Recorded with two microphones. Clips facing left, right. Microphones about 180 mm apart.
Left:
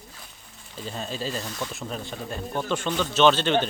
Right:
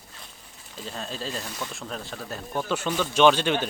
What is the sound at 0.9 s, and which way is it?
Speech, centre (ahead or behind).